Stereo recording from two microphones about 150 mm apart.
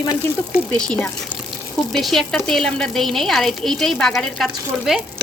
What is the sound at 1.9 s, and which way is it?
A woman's voice, centre (ahead or behind).